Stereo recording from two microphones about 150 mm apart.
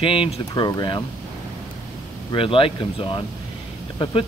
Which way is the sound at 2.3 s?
35° left (ahead or behind).